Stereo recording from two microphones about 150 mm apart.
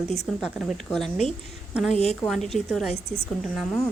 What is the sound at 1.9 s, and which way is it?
Speech, 45° left (ahead or behind).